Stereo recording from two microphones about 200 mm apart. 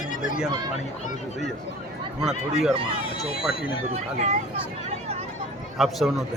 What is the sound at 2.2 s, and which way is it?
A man's voice, 5° right (ahead or behind).